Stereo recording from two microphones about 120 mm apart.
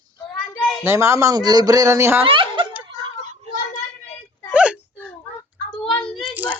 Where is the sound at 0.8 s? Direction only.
20° right (ahead or behind).